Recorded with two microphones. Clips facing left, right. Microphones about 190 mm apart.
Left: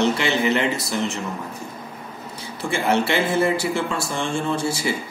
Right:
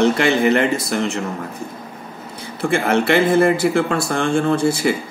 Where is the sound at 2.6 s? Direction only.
55° right (ahead or behind).